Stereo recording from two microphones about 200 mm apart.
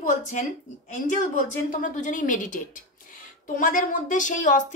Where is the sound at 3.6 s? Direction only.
40° left (ahead or behind).